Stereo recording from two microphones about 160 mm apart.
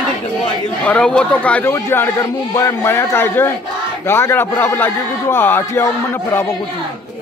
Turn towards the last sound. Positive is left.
turn(degrees=15)  # may be behind; listen again after turning